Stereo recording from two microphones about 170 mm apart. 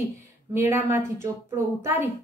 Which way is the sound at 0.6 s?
15° right (ahead or behind).